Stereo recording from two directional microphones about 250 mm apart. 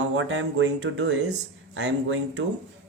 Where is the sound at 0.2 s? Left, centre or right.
Right.